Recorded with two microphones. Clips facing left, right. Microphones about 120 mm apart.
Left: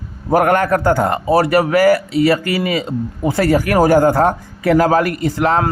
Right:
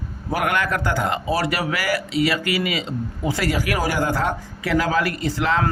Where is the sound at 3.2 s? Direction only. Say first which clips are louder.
Left 8 dB; 50° left (ahead or behind).